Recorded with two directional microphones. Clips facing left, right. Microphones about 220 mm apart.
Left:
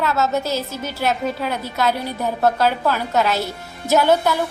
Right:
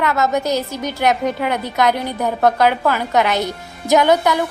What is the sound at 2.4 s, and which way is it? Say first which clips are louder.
A woman's voice: right 3 dB; 70° right (ahead or behind).